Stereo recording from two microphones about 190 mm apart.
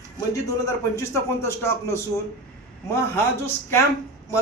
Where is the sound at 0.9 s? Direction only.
15° left (ahead or behind).